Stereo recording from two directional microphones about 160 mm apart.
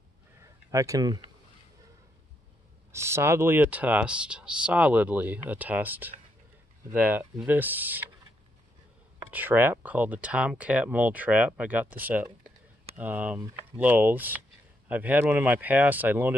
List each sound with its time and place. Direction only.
0.4 s a sound: 20° right (ahead or behind)
2.9 s speech: 15° right (ahead or behind)
9.3 s speech: 10° right (ahead or behind)